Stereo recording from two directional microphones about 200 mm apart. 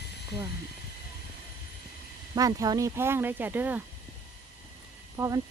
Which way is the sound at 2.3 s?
15° right (ahead or behind).